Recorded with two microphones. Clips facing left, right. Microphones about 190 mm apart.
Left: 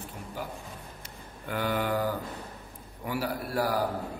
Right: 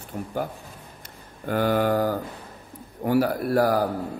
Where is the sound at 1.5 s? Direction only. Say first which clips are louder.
Right 7 dB; 45° right (ahead or behind).